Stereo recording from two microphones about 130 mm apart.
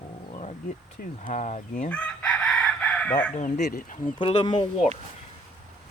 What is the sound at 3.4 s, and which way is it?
Speech, 70° left (ahead or behind).